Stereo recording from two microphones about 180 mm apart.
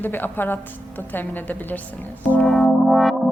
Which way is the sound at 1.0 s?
10° left (ahead or behind).